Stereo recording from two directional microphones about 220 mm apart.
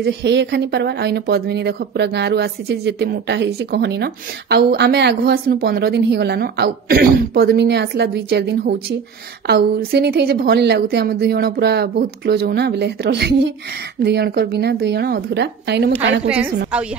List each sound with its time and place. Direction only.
0.0 s speech: 50° right (ahead or behind)
16.3 s a woman's voice: 5° right (ahead or behind)